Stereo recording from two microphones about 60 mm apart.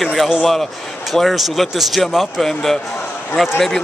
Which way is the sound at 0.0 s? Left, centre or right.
Centre.